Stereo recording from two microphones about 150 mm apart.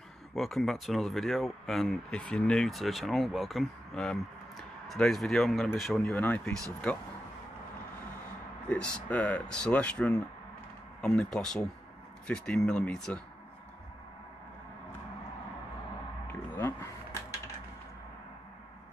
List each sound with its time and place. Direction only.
0.4 s speech: centre (ahead or behind)
6.1 s speech: 10° left (ahead or behind)
8.6 s speech: 5° left (ahead or behind)
16.3 s a sound: 15° left (ahead or behind)